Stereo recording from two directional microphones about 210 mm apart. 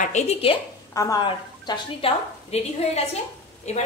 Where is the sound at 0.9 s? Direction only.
15° left (ahead or behind).